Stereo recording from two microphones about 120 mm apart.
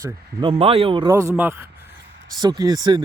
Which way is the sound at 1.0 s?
25° right (ahead or behind).